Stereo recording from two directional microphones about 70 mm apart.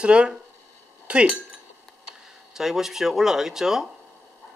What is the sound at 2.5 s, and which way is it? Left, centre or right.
A man's voice, centre.